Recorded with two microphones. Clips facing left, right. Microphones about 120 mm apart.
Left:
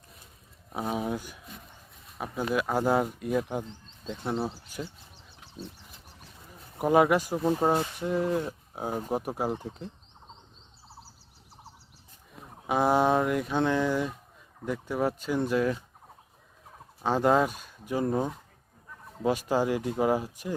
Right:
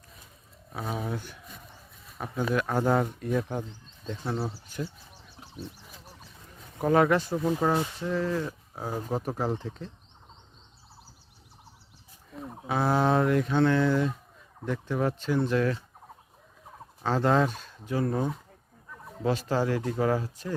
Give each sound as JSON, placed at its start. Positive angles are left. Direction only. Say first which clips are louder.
{"t": 0.7, "sound": "speech", "louder": "left 3 dB", "side_deg": 15}
{"t": 6.7, "sound": "speech", "louder": "even", "side_deg": 10}
{"t": 12.6, "sound": "speech", "louder": "left 2 dB", "side_deg": 15}
{"t": 17.0, "sound": "speech", "louder": "left 1 dB", "side_deg": 15}